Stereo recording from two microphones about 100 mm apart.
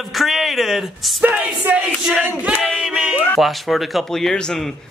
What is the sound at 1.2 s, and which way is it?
Music, 15° right (ahead or behind).